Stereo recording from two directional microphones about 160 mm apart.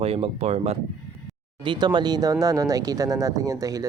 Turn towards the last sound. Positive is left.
turn(degrees=-20)  # may be behind; listen again after turning